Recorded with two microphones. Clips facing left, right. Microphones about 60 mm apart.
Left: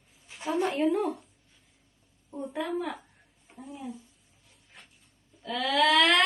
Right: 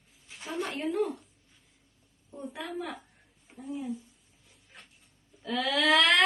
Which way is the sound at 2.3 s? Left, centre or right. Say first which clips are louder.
Left 5 dB; centre.